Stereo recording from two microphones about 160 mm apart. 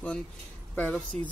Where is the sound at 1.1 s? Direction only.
40° right (ahead or behind).